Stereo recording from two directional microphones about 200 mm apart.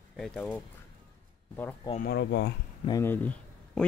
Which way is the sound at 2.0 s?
60° left (ahead or behind).